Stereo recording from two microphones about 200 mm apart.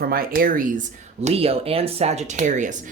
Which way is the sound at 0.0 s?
50° right (ahead or behind).